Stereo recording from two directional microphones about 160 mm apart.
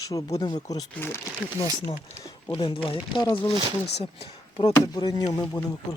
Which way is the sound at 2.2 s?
30° left (ahead or behind).